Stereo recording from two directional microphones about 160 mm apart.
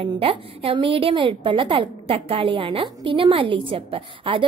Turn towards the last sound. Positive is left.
turn(degrees=-35)  # may be behind; listen again after turning